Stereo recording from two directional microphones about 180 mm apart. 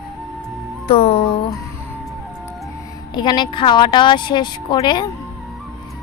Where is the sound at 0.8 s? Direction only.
30° left (ahead or behind).